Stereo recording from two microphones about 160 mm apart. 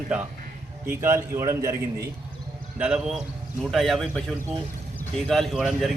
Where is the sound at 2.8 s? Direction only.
5° right (ahead or behind).